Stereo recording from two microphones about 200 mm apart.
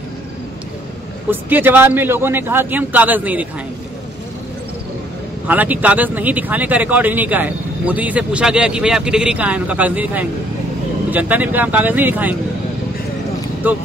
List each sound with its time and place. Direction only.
1.3 s speech: 10° right (ahead or behind)
5.5 s speech: 10° right (ahead or behind)
13.6 s speech: 10° right (ahead or behind)